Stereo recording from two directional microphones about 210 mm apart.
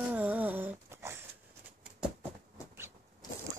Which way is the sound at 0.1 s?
5° right (ahead or behind).